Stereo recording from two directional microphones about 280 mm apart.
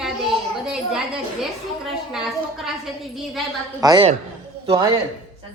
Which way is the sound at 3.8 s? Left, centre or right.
Centre.